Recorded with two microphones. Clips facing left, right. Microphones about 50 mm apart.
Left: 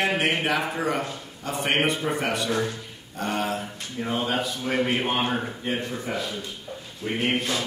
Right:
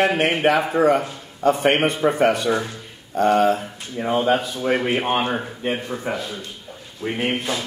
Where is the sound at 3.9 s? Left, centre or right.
Right.